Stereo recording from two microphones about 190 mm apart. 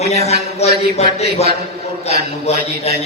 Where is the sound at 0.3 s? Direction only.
35° left (ahead or behind).